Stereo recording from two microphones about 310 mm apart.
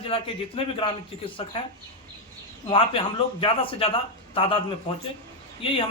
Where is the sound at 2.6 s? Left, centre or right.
Centre.